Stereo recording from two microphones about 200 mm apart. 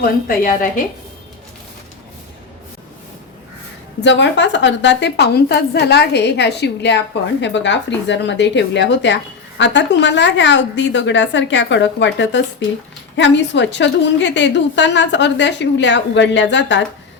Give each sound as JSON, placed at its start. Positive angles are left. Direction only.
{"t": 0.0, "sound": "a woman's voice", "side_deg": 45}
{"t": 4.0, "sound": "a woman's voice", "side_deg": 65}